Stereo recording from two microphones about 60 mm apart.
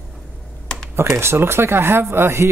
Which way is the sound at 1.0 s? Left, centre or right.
Right.